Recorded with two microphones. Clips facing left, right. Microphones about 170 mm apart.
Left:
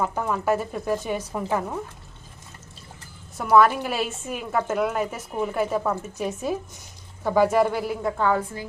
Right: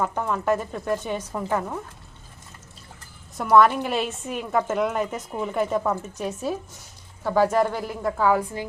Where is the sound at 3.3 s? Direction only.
5° left (ahead or behind).